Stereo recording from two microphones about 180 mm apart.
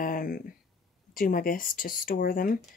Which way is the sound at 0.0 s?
50° left (ahead or behind).